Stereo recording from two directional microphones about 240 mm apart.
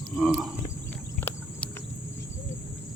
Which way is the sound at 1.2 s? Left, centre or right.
Centre.